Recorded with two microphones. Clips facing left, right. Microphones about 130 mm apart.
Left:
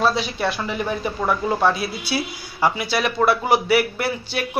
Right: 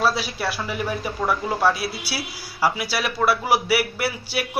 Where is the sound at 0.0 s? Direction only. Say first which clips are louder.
Left 2 dB; 5° right (ahead or behind).